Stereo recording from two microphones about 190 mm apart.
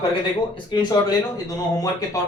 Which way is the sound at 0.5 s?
25° left (ahead or behind).